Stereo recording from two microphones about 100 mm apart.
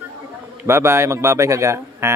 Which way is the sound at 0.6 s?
25° right (ahead or behind).